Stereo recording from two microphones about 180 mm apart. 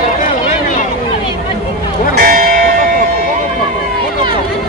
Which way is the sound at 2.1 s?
45° right (ahead or behind).